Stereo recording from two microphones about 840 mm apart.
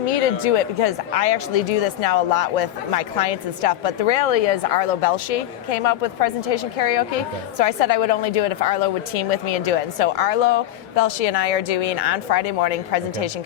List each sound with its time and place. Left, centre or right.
0.1 s speech: left
11.7 s a woman's voice: left
11.9 s a woman's voice: left